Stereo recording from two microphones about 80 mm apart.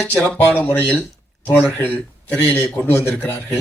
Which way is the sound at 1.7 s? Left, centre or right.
Left.